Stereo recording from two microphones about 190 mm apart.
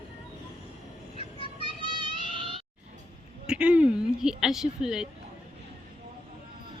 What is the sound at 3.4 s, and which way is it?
Speech, 5° right (ahead or behind).